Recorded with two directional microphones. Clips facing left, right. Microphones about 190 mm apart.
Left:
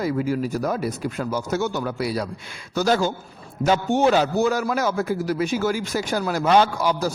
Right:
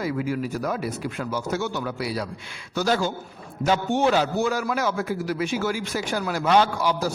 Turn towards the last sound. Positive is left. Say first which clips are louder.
# left 2 dB
turn(degrees=45)  # may be behind; listen again after turning